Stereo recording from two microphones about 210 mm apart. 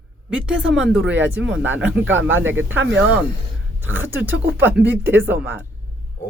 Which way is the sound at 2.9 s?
5° right (ahead or behind).